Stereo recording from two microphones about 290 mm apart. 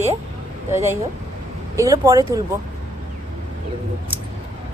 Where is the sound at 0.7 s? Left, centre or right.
Centre.